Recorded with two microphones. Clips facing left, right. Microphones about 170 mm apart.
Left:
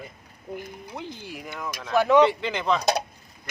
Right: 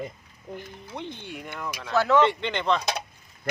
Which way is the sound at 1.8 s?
15° left (ahead or behind).